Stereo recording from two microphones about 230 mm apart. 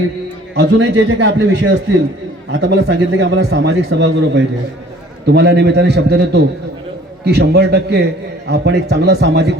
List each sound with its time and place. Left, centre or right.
0.5 s a man's voice: right